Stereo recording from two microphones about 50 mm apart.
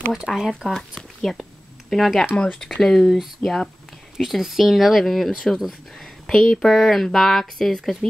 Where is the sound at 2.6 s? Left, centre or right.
Centre.